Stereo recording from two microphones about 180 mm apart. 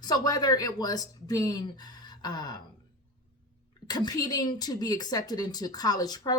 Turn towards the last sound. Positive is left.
turn(degrees=20)  # may be behind; listen again after turning